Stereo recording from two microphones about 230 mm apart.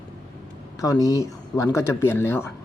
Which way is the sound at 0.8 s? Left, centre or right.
Centre.